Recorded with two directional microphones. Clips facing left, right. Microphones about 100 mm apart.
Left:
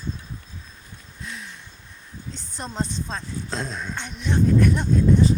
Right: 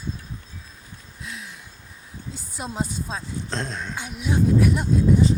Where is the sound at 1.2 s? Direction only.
Centre (ahead or behind).